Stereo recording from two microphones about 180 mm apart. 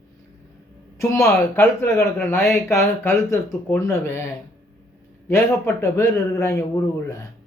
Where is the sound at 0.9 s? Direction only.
15° left (ahead or behind).